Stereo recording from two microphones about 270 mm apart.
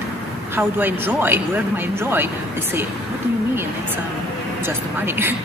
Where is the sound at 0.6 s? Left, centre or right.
Centre.